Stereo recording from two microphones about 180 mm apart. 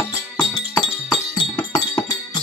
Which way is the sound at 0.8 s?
25° left (ahead or behind).